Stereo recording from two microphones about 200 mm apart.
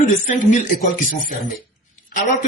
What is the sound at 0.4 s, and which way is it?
Speech, 40° left (ahead or behind).